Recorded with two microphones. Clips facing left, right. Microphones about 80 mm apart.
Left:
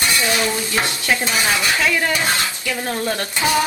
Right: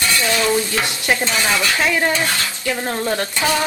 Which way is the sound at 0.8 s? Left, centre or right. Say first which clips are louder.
Right 1 dB; right.